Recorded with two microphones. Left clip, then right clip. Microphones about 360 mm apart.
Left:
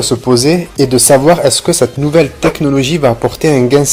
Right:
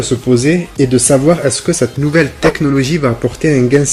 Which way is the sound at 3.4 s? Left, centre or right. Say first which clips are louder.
Left 2 dB; left.